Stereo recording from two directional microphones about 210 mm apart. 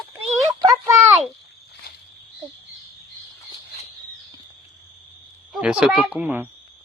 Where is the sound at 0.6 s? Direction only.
15° right (ahead or behind).